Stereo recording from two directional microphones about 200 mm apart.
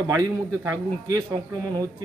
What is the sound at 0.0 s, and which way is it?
A man's voice, 20° right (ahead or behind).